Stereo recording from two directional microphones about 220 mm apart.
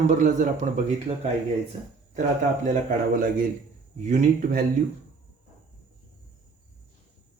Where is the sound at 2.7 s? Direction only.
40° right (ahead or behind).